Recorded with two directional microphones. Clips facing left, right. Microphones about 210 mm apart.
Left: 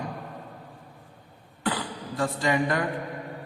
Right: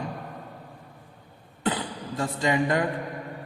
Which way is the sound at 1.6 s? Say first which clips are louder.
Right 1 dB; 20° right (ahead or behind).